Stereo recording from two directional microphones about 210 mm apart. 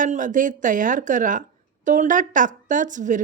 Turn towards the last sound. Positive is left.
turn(degrees=-35)  # may be behind; listen again after turning